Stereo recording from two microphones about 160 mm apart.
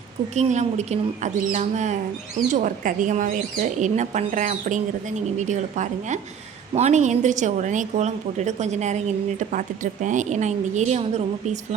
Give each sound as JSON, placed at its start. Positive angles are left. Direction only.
{"t": 0.3, "sound": "a woman's voice", "side_deg": -45}